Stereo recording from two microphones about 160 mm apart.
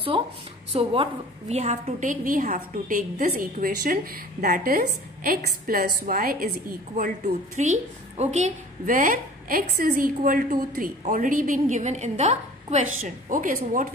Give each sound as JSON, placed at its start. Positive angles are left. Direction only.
{"t": 0.1, "sound": "a woman's voice", "side_deg": -35}
{"t": 7.5, "sound": "a woman's voice", "side_deg": -50}